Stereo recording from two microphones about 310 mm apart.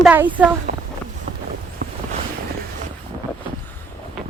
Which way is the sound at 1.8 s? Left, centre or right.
Right.